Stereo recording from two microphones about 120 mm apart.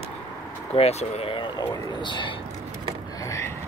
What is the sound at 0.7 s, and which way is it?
Speech, 60° left (ahead or behind).